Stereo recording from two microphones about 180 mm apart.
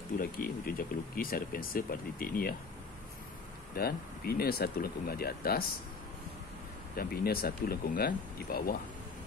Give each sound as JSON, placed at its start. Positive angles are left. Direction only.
{"t": 0.2, "sound": "speech", "side_deg": 50}
{"t": 3.7, "sound": "speech", "side_deg": 60}
{"t": 7.0, "sound": "speech", "side_deg": 55}